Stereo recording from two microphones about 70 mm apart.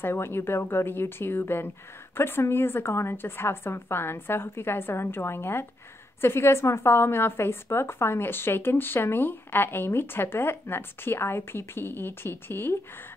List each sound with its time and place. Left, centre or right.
0.0 s a woman's voice: left